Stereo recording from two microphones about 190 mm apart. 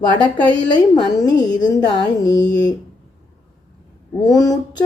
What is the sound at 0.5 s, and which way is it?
A woman's voice, 20° left (ahead or behind).